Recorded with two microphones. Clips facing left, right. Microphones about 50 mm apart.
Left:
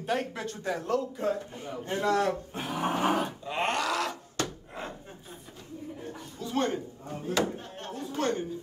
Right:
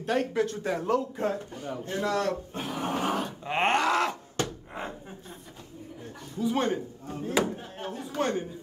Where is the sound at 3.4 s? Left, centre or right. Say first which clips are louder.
Right 8 dB; right.